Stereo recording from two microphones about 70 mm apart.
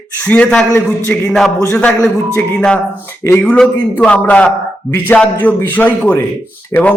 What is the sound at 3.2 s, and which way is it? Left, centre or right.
Speech, left.